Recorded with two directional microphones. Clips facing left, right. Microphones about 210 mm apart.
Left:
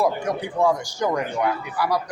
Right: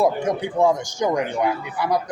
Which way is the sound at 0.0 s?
20° right (ahead or behind).